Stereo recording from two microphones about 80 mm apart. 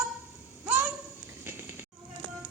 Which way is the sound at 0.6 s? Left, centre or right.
Right.